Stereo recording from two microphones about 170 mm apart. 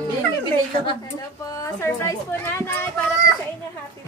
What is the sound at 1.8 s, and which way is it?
Speech, 15° left (ahead or behind).